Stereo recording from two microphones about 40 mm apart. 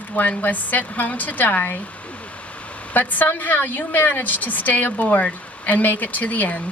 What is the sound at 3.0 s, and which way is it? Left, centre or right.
Speech, left.